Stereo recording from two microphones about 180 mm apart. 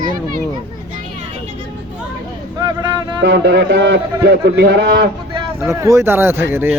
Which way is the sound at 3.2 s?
75° right (ahead or behind).